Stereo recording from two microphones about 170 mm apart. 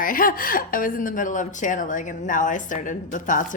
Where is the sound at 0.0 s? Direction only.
55° left (ahead or behind).